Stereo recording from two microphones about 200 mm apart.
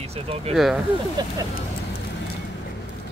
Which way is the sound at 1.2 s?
20° right (ahead or behind).